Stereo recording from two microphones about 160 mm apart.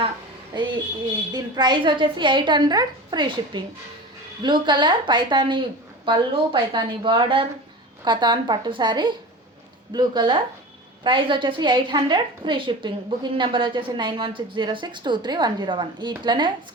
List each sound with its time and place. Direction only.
0.5 s a woman's voice: 30° right (ahead or behind)